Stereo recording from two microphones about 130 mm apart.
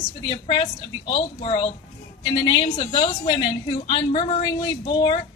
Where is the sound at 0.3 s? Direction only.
40° left (ahead or behind).